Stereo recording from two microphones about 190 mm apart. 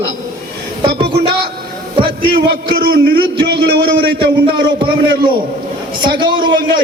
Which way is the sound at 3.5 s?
60° right (ahead or behind).